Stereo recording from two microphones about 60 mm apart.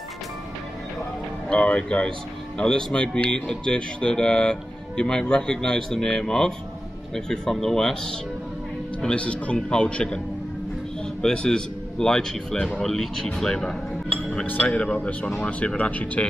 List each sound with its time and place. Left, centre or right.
1.5 s speech: centre
11.2 s speech: centre